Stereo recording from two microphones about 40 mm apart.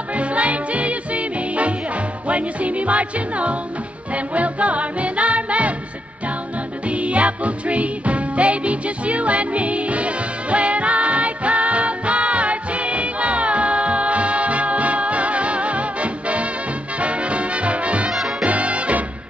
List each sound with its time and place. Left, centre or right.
0.1 s music: right
6.9 s music: right